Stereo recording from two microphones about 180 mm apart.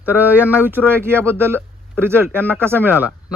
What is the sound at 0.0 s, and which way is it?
Speech, 10° right (ahead or behind).